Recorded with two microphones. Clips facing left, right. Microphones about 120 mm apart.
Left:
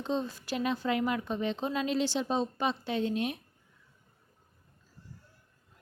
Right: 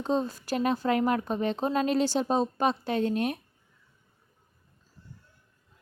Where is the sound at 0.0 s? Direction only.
45° right (ahead or behind).